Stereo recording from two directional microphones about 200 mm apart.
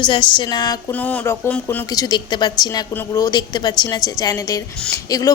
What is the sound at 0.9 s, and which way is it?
A woman's voice, 5° left (ahead or behind).